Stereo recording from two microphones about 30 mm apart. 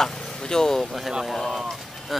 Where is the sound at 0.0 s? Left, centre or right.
Centre.